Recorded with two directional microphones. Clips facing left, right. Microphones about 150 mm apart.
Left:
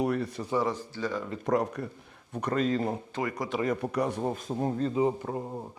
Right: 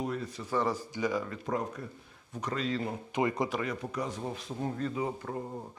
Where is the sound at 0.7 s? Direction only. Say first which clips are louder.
Right 1 dB; 15° right (ahead or behind).